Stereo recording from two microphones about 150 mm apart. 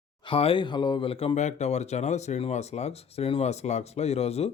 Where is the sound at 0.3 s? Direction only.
35° left (ahead or behind).